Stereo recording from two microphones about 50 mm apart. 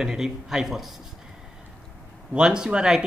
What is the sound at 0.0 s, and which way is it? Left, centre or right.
Speech, centre.